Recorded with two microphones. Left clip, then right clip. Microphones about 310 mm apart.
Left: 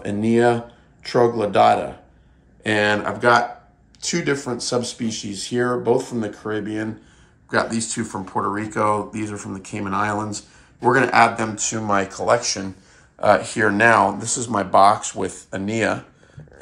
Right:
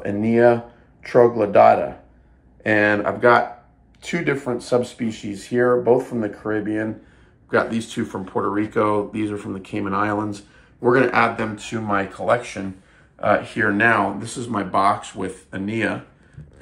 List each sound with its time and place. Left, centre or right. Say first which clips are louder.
0.0 s speech: even; centre
1.0 s speech: right 3 dB; left
2.6 s speech: right 2 dB; centre
2.9 s speech: even; left
7.4 s speech: right 1 dB; centre
8.0 s speech: right 1 dB; left
9.1 s speech: right 3 dB; centre